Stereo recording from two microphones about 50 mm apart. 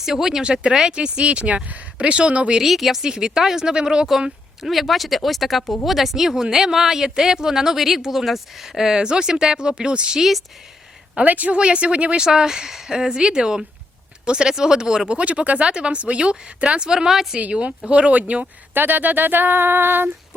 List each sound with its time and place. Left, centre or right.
0.0 s speech: centre
0.4 s speech: centre
2.6 s speech: centre
10.2 s speech: centre
11.2 s speech: right; by 17.3 s centre
17.5 s speech: right
18.7 s a sound: right